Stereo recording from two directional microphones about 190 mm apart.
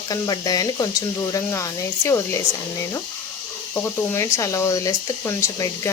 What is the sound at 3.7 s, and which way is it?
Speech, 10° left (ahead or behind).